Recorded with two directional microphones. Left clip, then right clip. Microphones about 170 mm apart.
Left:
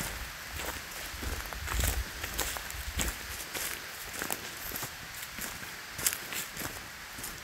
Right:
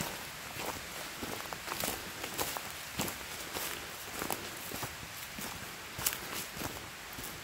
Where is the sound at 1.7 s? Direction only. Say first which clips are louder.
Left 3 dB; 10° right (ahead or behind).